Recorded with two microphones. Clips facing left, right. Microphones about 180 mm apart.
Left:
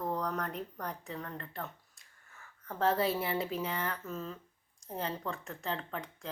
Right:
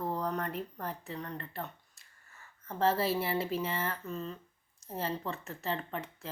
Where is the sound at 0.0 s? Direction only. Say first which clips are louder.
Right 1 dB; centre (ahead or behind).